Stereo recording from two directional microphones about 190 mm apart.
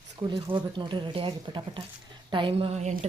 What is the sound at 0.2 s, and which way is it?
A woman's voice, 25° right (ahead or behind).